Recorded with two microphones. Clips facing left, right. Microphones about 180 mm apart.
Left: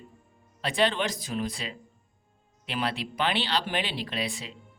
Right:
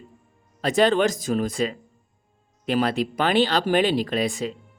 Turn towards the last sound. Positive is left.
turn(degrees=-45)  # may be behind; listen again after turning